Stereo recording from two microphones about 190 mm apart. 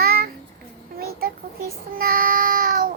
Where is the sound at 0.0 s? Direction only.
55° right (ahead or behind).